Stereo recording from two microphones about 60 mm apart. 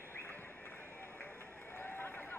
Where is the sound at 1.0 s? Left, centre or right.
Left.